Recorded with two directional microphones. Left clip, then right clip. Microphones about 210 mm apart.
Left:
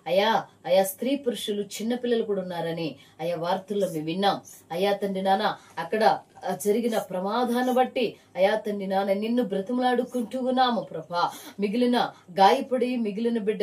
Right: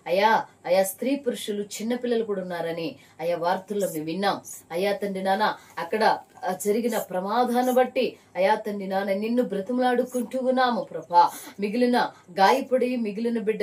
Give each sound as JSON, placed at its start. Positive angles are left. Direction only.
{"t": 0.0, "sound": "speech", "side_deg": 0}